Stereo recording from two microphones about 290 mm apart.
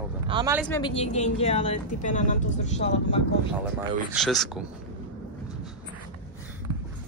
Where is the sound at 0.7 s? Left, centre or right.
Centre.